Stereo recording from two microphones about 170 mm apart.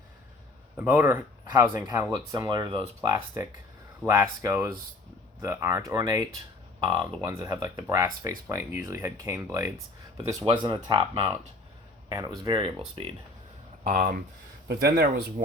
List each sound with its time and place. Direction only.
0.8 s speech: 10° right (ahead or behind); by 13.1 s 30° right (ahead or behind)
13.8 s speech: 55° right (ahead or behind)
14.7 s speech: 65° right (ahead or behind)